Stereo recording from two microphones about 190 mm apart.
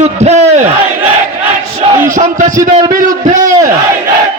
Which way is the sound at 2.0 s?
40° right (ahead or behind).